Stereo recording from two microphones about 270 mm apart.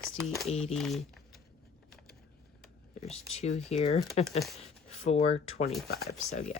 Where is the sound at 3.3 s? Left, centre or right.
Left.